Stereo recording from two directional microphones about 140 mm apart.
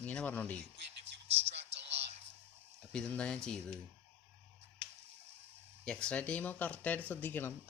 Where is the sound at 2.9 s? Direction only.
5° left (ahead or behind).